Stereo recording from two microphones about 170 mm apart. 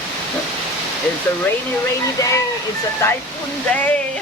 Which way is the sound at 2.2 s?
20° left (ahead or behind).